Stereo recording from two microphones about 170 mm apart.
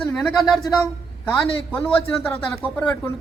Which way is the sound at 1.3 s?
15° left (ahead or behind).